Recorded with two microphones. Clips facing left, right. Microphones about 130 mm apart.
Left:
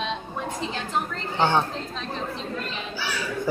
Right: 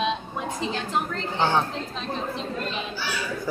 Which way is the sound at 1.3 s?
15° left (ahead or behind).